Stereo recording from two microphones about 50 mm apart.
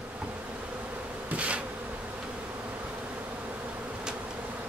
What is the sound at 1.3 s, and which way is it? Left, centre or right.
Bee, right.